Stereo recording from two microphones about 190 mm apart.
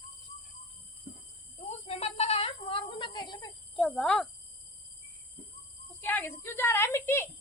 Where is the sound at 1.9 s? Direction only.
35° left (ahead or behind).